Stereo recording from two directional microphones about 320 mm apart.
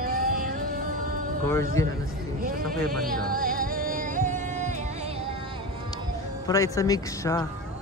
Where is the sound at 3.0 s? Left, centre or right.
Right.